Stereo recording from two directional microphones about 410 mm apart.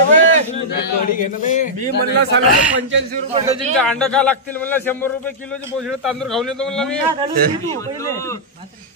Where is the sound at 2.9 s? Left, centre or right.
Right.